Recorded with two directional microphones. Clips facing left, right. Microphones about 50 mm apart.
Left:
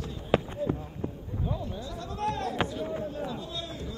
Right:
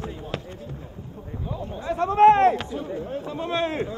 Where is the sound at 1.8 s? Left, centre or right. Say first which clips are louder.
Right 19 dB; right.